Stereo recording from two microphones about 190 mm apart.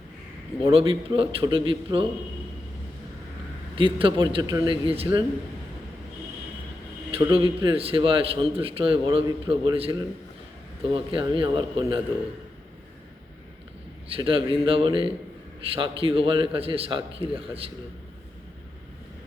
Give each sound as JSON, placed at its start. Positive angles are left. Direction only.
{"t": 0.6, "sound": "a man's voice", "side_deg": -30}
{"t": 3.8, "sound": "a man's voice", "side_deg": -25}
{"t": 7.1, "sound": "a man's voice", "side_deg": -30}
{"t": 10.9, "sound": "a man's voice", "side_deg": -25}
{"t": 14.2, "sound": "a man's voice", "side_deg": -25}